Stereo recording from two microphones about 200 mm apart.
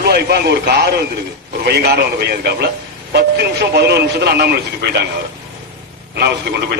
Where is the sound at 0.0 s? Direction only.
55° right (ahead or behind).